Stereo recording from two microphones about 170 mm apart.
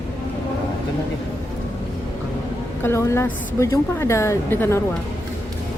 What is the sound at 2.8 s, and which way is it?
A woman's voice, 15° left (ahead or behind).